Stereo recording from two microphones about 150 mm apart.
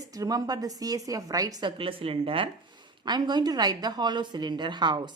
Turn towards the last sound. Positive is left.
turn(degrees=-30)  # may be behind; listen again after turning